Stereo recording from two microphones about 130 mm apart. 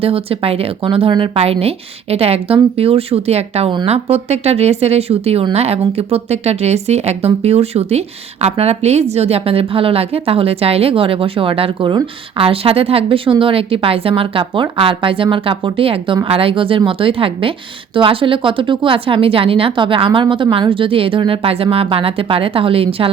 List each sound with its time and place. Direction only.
0.0 s a woman's voice: 45° right (ahead or behind)